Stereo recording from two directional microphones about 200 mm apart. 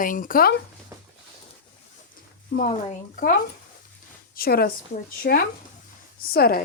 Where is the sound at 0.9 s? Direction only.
15° right (ahead or behind).